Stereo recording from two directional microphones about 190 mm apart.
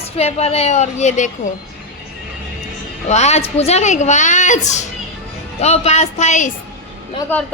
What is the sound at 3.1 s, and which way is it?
A woman's voice, 35° left (ahead or behind).